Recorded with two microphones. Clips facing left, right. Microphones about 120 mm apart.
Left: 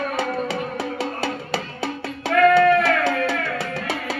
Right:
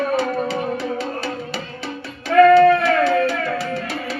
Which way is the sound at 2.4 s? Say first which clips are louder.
Right 5 dB; 25° right (ahead or behind).